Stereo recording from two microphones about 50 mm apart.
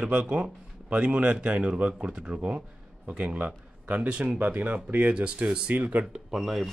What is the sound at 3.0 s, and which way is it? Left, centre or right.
Speech, right.